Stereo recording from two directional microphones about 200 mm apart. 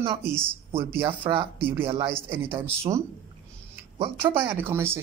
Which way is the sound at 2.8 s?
15° right (ahead or behind).